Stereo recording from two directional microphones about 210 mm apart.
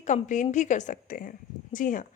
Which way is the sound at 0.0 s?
35° left (ahead or behind).